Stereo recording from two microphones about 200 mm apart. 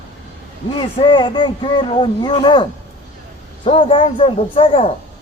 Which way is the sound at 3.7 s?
25° left (ahead or behind).